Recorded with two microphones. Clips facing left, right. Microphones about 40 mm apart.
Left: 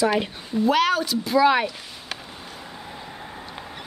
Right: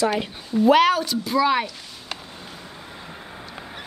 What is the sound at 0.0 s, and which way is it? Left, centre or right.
Speech, centre.